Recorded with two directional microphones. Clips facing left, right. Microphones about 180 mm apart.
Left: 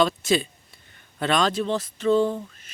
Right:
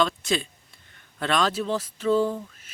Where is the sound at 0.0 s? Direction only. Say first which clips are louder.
Left 3 dB; 5° left (ahead or behind).